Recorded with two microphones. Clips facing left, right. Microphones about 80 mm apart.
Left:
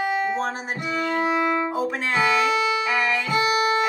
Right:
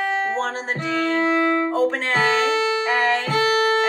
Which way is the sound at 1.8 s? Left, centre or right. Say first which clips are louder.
Right 3 dB; right.